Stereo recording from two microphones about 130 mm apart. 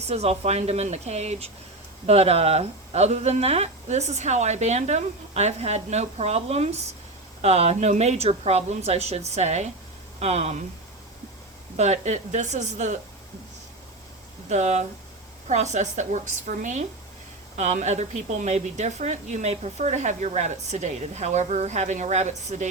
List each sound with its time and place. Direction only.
0.1 s a woman's voice: 55° right (ahead or behind)
11.8 s a woman's voice: 60° right (ahead or behind)
14.5 s a woman's voice: 60° right (ahead or behind)